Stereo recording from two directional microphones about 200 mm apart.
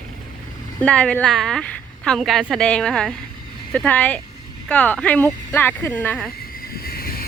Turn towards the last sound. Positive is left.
turn(degrees=45)  # may be behind; listen again after turning